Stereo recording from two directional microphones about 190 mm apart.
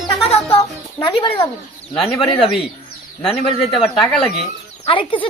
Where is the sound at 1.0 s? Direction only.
25° left (ahead or behind).